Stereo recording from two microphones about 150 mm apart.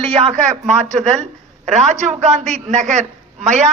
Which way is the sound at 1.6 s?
50° right (ahead or behind).